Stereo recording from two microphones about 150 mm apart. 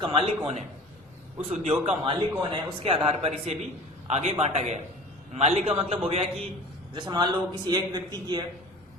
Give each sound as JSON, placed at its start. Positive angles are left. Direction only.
{"t": 0.0, "sound": "a man's voice", "side_deg": -40}
{"t": 1.4, "sound": "a man's voice", "side_deg": -45}
{"t": 6.9, "sound": "a man's voice", "side_deg": -30}